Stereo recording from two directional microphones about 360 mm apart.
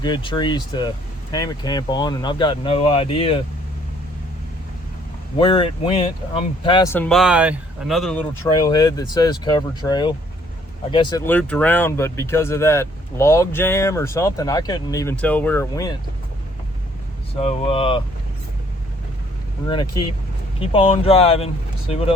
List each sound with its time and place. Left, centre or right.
0.0 s speech: centre
5.4 s speech: centre
17.3 s speech: centre
19.6 s speech: centre